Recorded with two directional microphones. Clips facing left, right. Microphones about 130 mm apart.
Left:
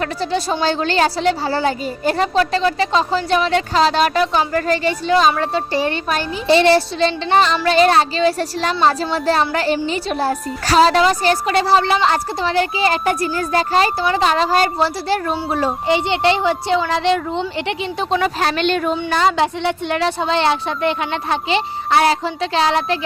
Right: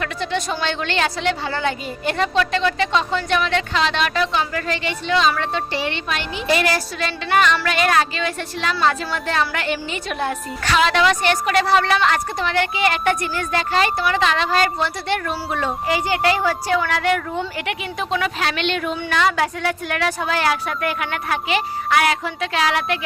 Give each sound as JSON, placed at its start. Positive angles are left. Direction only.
{"t": 0.0, "sound": "a woman's voice", "side_deg": 35}
{"t": 6.5, "sound": "a woman's voice", "side_deg": 30}
{"t": 19.4, "sound": "speech", "side_deg": 25}